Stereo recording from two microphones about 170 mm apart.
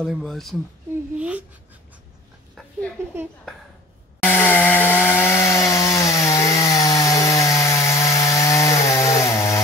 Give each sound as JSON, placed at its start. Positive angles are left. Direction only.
{"t": 0.0, "sound": "speech", "side_deg": 0}
{"t": 4.2, "sound": "chainsaw", "side_deg": 10}